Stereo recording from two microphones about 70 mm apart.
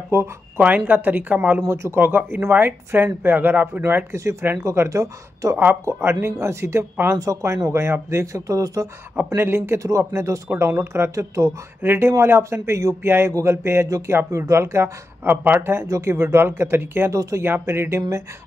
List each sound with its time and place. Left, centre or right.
0.1 s speech: right
0.6 s speech: right
1.7 s speech: right
3.8 s speech: right
5.9 s speech: right
9.1 s speech: right
11.8 s speech: right
13.8 s speech: right
17.1 s speech: right
17.4 s speech: right